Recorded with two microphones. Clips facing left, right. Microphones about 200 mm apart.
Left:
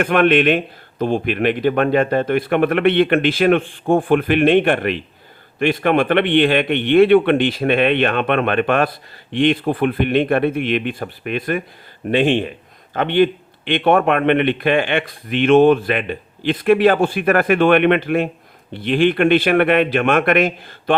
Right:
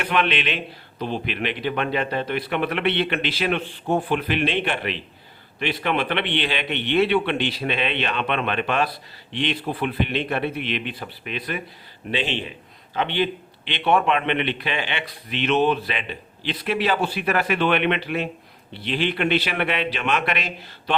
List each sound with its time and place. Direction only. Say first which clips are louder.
0.0 s a man's voice: left 9 dB; 50° left (ahead or behind)